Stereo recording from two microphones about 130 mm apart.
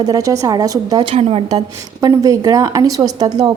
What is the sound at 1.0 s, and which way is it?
Speech, 50° right (ahead or behind).